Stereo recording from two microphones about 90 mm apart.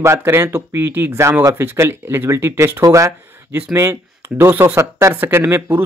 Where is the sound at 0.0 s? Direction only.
30° right (ahead or behind).